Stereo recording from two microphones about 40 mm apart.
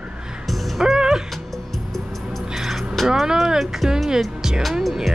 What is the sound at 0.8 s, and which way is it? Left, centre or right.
Music, centre.